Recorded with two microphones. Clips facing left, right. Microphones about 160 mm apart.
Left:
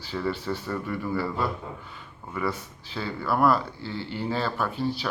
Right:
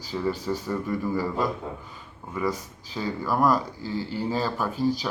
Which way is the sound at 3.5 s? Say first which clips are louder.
Right 2 dB; 40° right (ahead or behind).